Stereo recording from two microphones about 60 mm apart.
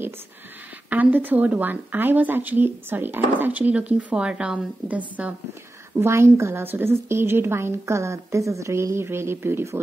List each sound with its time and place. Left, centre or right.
0.8 s speech: right
5.9 s a woman's voice: right